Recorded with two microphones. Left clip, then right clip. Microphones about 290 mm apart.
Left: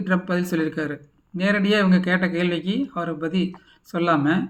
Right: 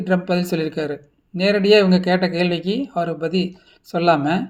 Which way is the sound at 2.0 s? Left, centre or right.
Centre.